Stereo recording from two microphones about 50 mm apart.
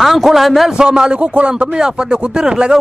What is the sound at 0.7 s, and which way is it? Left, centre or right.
A man's voice, centre.